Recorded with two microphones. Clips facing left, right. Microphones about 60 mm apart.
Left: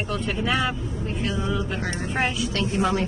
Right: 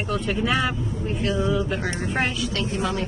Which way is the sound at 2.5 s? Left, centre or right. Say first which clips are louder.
Left 2 dB; left.